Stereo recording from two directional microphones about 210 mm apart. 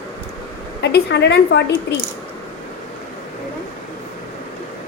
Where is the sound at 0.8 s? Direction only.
55° left (ahead or behind).